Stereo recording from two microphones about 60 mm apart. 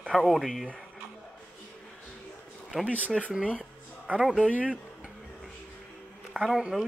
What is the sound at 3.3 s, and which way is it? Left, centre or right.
Speech, right.